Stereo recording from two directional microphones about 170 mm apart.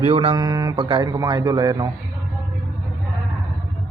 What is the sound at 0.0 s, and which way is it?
A man's voice, 35° right (ahead or behind).